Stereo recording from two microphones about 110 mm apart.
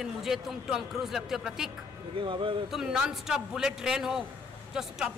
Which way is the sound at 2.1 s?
50° right (ahead or behind).